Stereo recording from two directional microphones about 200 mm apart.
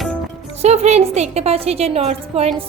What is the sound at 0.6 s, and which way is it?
A woman's voice, 35° right (ahead or behind).